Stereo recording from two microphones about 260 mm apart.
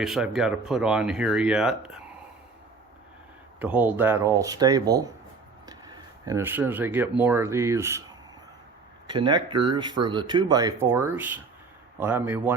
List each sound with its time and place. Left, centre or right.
0.0 s speech: centre
3.6 s speech: centre
9.0 s speech: centre